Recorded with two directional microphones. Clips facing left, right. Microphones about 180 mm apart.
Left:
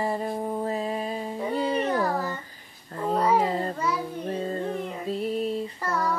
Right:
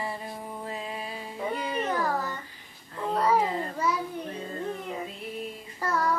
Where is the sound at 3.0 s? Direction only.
5° left (ahead or behind).